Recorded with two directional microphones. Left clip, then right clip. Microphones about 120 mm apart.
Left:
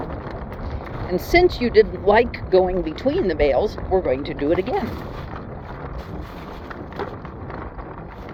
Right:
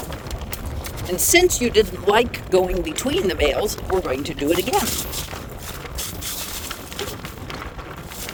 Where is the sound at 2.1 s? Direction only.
40° right (ahead or behind).